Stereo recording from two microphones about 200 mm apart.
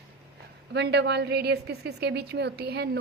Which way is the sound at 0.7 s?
55° right (ahead or behind).